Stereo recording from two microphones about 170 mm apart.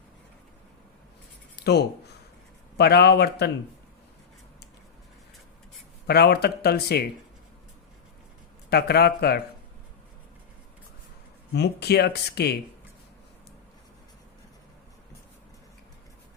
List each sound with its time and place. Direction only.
2.7 s speech: 70° left (ahead or behind)
6.1 s speech: 70° left (ahead or behind)
8.7 s speech: 70° left (ahead or behind)
11.5 s speech: 75° left (ahead or behind)